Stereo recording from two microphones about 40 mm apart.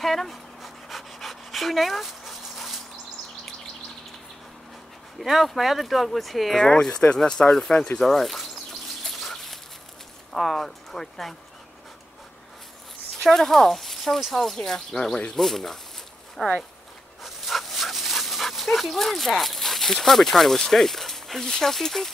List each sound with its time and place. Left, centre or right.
0.0 s pant: centre
5.2 s speech: centre
6.6 s speech: centre
7.4 s speech: left
8.0 s speech: centre
9.0 s bird: centre
10.3 s speech: centre
13.2 s speech: centre
17.2 s dog: centre